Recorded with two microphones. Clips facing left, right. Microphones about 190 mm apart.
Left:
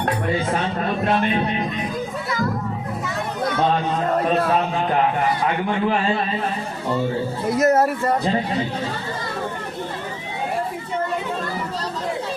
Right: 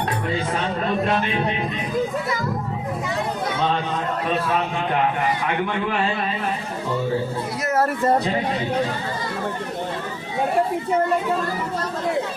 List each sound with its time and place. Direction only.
7.5 s a man's voice: 45° left (ahead or behind)